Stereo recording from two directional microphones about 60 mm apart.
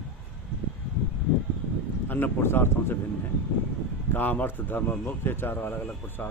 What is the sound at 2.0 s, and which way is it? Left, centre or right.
Speech, left.